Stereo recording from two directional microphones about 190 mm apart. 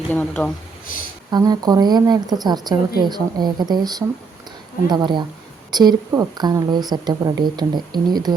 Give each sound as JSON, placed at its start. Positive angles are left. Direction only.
{"t": 0.1, "sound": "speech", "side_deg": 5}
{"t": 1.3, "sound": "a woman's voice", "side_deg": -20}